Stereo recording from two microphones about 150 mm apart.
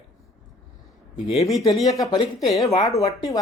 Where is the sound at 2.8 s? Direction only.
25° left (ahead or behind).